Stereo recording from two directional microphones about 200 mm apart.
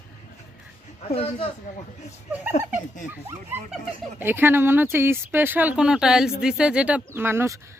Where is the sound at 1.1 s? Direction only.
30° left (ahead or behind).